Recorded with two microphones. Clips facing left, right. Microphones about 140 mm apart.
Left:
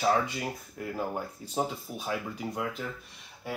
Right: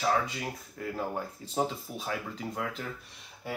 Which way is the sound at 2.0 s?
10° left (ahead or behind).